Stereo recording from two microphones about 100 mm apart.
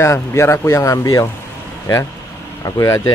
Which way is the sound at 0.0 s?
25° left (ahead or behind).